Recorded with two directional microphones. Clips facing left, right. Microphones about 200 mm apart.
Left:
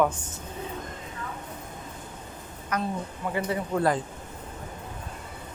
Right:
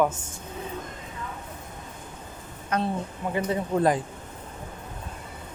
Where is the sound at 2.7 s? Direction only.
30° right (ahead or behind).